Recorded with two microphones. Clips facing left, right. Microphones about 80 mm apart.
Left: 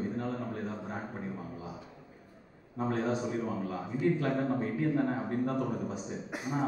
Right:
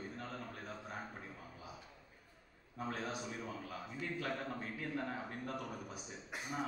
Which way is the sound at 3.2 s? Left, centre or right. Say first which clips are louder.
Left 11 dB; left.